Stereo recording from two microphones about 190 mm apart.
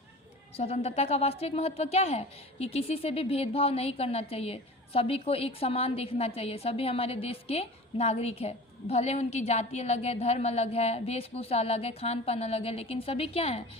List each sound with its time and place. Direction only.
0.5 s a woman's voice: 30° left (ahead or behind)